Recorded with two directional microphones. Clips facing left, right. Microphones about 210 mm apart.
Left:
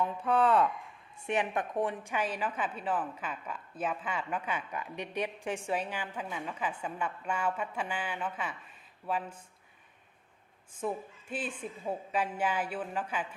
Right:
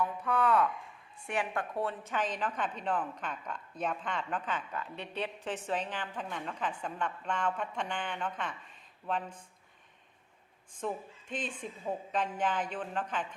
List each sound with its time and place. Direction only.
0.0 s a woman's voice: 30° left (ahead or behind); by 9.4 s 5° left (ahead or behind)
10.8 s a woman's voice: 5° left (ahead or behind)